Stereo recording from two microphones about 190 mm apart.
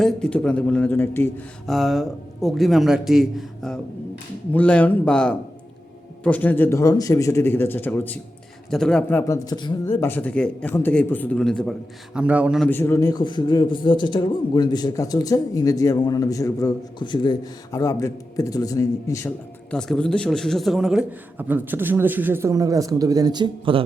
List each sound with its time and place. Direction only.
0.0 s a man's voice: 5° left (ahead or behind)
1.7 s a man's voice: centre (ahead or behind); by 9.7 s 20° left (ahead or behind)
9.8 s a man's voice: 10° left (ahead or behind)
12.1 s a man's voice: 5° right (ahead or behind)
12.6 s speech: 10° left (ahead or behind)
19.7 s a man's voice: 5° left (ahead or behind); by 23.8 s 25° right (ahead or behind)